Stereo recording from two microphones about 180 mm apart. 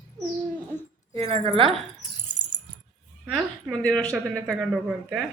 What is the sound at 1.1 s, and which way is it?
Speech, 35° right (ahead or behind).